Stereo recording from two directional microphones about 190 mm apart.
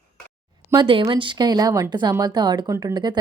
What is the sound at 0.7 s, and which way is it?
Speech, 25° right (ahead or behind).